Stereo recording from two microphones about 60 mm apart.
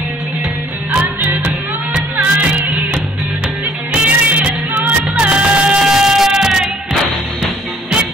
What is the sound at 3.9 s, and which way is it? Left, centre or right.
Music, right.